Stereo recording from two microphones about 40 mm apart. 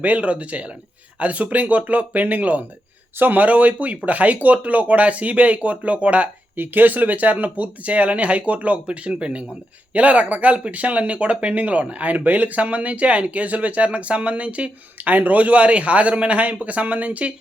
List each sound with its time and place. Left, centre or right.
0.0 s speech: right
6.6 s speech: right
14.9 s speech: right